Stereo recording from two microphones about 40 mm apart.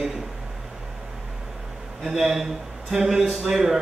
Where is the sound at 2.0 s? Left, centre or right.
Centre.